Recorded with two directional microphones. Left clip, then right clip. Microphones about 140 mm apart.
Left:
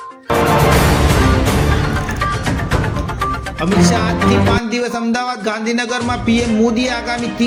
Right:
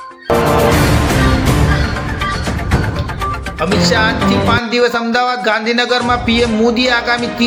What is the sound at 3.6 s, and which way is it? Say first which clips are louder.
A man's voice: right 3 dB; 40° left (ahead or behind).